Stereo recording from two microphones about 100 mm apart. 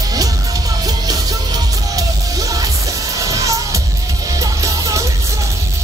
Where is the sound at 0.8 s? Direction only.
40° right (ahead or behind).